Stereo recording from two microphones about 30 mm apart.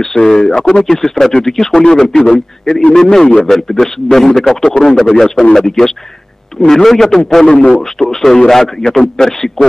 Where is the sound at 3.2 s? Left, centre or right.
Left.